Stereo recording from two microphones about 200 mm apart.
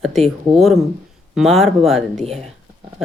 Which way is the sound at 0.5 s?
Centre (ahead or behind).